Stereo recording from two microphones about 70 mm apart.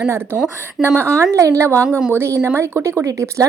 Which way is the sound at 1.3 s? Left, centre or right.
Right.